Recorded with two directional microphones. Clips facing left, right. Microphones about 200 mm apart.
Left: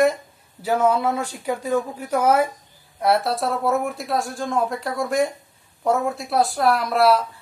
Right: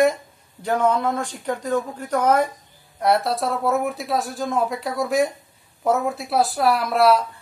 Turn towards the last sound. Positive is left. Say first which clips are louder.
# even
turn(degrees=0)  # may be behind; listen again after turning